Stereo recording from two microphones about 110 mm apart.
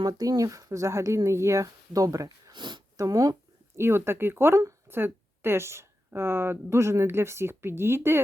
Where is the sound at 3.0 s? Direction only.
35° right (ahead or behind).